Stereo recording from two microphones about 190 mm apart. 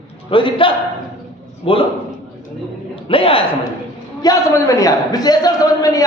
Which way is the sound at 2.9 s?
30° left (ahead or behind).